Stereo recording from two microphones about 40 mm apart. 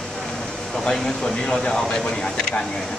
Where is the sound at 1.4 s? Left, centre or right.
Centre.